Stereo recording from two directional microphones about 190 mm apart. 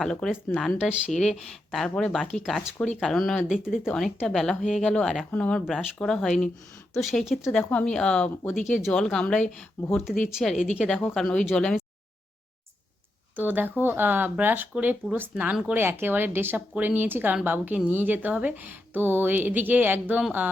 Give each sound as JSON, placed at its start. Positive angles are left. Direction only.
{"t": 0.0, "sound": "speech", "side_deg": 0}
{"t": 8.5, "sound": "speech", "side_deg": 40}
{"t": 8.8, "sound": "speech", "side_deg": 5}
{"t": 13.3, "sound": "speech", "side_deg": -10}